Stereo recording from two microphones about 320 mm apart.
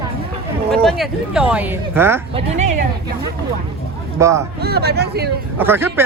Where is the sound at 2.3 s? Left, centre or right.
Centre.